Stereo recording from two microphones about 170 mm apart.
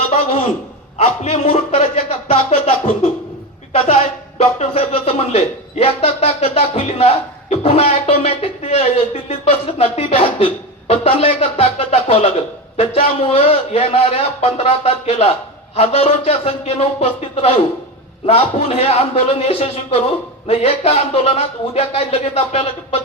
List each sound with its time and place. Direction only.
0.1 s a sound: 35° left (ahead or behind)
0.9 s speech: 40° left (ahead or behind)
4.4 s a man's voice: 40° left (ahead or behind)